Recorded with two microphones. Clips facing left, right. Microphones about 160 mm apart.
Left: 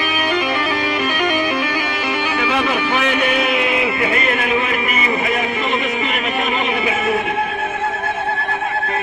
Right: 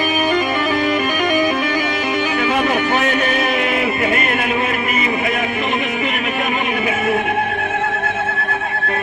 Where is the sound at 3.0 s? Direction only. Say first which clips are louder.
Even; 45° right (ahead or behind).